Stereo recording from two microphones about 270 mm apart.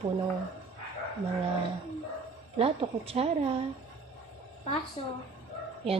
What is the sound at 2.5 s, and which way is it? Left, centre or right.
Speech, right.